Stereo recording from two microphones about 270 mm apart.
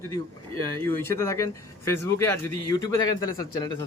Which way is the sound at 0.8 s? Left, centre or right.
Centre.